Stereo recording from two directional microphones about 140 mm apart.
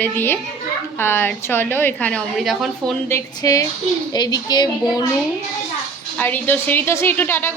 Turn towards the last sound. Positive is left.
turn(degrees=15)  # may be behind; listen again after turning